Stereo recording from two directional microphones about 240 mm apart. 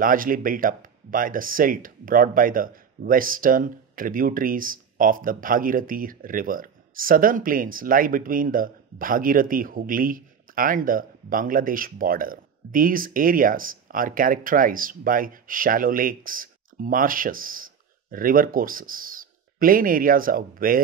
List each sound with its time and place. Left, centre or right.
0.0 s speech: right